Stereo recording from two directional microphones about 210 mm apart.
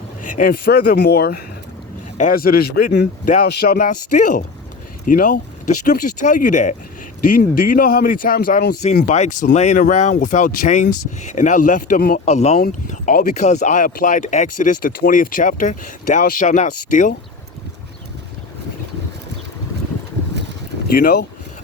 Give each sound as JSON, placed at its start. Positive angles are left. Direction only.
{"t": 0.2, "sound": "speech", "side_deg": 40}
{"t": 20.9, "sound": "speech", "side_deg": 45}